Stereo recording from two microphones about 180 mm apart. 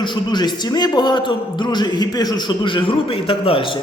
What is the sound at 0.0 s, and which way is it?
A man's voice, 25° left (ahead or behind).